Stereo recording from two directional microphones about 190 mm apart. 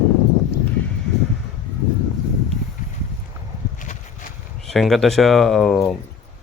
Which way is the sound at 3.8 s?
45° left (ahead or behind).